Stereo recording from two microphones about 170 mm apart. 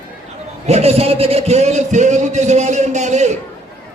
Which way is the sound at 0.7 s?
40° right (ahead or behind).